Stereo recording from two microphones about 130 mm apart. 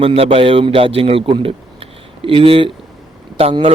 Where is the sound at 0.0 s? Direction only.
50° right (ahead or behind).